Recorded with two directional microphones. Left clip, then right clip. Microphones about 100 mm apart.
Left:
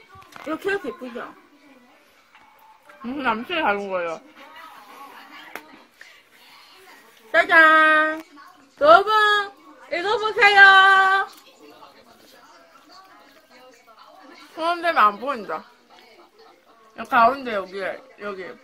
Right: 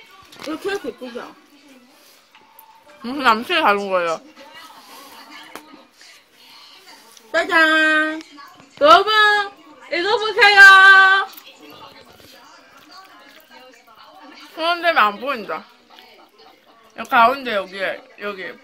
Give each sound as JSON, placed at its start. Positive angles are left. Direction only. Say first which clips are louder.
{"t": 0.5, "sound": "speech", "louder": "even", "side_deg": 0}
{"t": 3.0, "sound": "a woman's voice", "louder": "right 8 dB", "side_deg": -30}
{"t": 7.4, "sound": "child singing", "louder": "left 1 dB", "side_deg": -40}
{"t": 8.7, "sound": "a woman's voice", "louder": "right 2 dB", "side_deg": -20}
{"t": 14.5, "sound": "speech", "louder": "right 4 dB", "side_deg": 5}
{"t": 16.9, "sound": "speech", "louder": "right 3 dB", "side_deg": -5}